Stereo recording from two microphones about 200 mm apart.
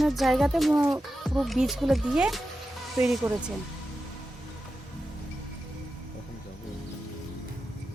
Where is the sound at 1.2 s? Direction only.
Centre (ahead or behind).